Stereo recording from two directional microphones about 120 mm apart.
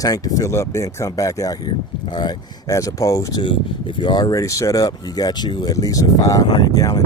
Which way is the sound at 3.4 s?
45° left (ahead or behind).